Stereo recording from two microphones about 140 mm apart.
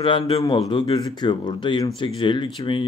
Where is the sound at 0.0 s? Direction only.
40° left (ahead or behind).